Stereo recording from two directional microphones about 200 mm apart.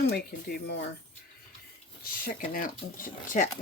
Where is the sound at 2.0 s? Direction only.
45° left (ahead or behind).